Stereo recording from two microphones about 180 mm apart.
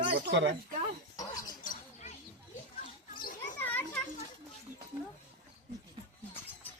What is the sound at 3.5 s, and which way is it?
Children playing, 10° left (ahead or behind).